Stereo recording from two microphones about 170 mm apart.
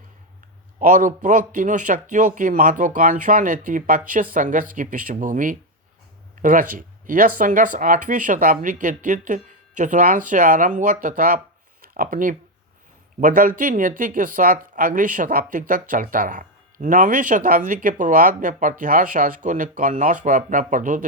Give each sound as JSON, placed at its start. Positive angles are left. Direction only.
{"t": 0.8, "sound": "speech", "side_deg": -50}